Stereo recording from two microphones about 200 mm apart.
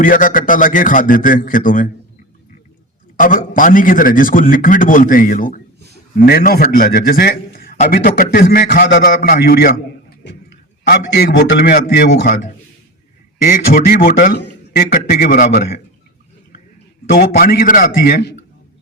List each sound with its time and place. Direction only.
0.0 s a man's voice: 45° left (ahead or behind)
3.2 s a man's voice: 40° left (ahead or behind)
10.8 s a man's voice: 55° left (ahead or behind)
17.1 s a man's voice: 45° left (ahead or behind)